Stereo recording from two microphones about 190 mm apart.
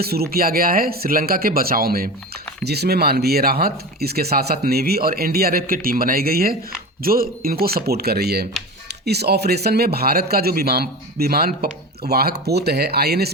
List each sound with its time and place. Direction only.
0.0 s speech: 55° right (ahead or behind)